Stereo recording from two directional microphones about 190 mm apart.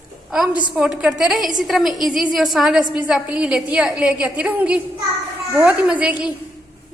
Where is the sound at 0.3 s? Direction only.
5° right (ahead or behind).